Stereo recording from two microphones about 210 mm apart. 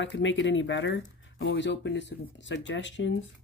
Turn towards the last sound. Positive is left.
turn(degrees=60)  # may be behind; listen again after turning